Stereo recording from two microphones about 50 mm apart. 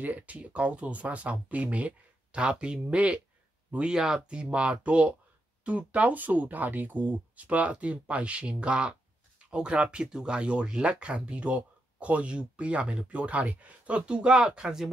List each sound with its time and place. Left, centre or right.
0.0 s speech: right; by 14.9 s centre